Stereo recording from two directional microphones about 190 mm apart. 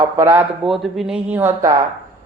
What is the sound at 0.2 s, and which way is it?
Speech, 10° right (ahead or behind).